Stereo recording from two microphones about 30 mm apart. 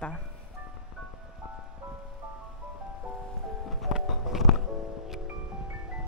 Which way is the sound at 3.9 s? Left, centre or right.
Centre.